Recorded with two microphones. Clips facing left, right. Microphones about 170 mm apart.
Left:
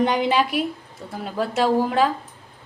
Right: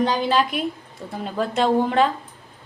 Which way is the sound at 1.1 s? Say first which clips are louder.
Even; 5° left (ahead or behind).